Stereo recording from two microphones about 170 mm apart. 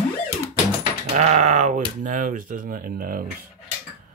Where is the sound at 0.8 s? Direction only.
45° right (ahead or behind).